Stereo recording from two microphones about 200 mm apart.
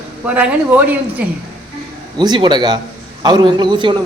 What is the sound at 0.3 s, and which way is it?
Speech, 10° right (ahead or behind).